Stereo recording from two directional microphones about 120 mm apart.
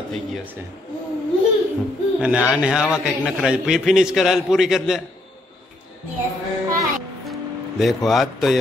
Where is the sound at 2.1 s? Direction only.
10° right (ahead or behind).